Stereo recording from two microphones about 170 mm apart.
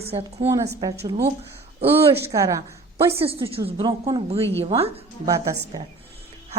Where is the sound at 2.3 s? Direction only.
20° right (ahead or behind); by 4.9 s 35° right (ahead or behind).